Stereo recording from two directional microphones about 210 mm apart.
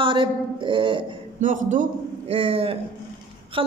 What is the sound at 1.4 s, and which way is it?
A man's voice, 35° right (ahead or behind).